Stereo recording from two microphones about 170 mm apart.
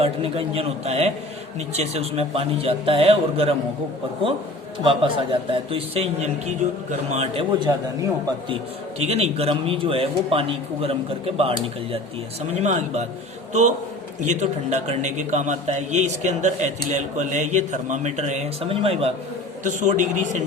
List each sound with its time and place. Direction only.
0.0 s a man's voice: 35° right (ahead or behind)
4.8 s a man's voice: 30° right (ahead or behind)
7.6 s a man's voice: 25° right (ahead or behind)
9.0 s a man's voice: 35° right (ahead or behind)
19.6 s a man's voice: 45° right (ahead or behind)